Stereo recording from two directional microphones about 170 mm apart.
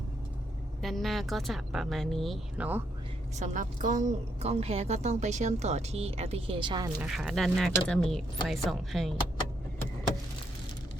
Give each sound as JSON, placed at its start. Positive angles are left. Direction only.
{"t": 0.8, "sound": "speech", "side_deg": 0}
{"t": 3.3, "sound": "a woman's voice", "side_deg": -45}
{"t": 7.0, "sound": "speech", "side_deg": 0}